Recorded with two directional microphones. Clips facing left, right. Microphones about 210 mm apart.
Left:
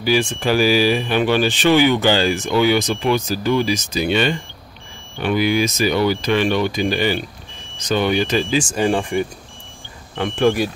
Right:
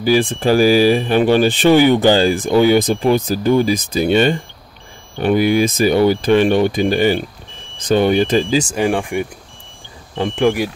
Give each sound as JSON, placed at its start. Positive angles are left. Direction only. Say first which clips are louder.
{"t": 0.0, "sound": "speech", "louder": "right 4 dB", "side_deg": -35}
{"t": 0.6, "sound": "speech", "louder": "right 4 dB", "side_deg": -45}
{"t": 8.7, "sound": "speech", "louder": "right 1 dB", "side_deg": -10}
{"t": 10.3, "sound": "speech", "louder": "right 1 dB", "side_deg": -15}